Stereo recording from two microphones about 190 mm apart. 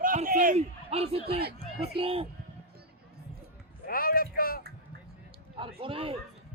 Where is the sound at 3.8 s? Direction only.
50° left (ahead or behind).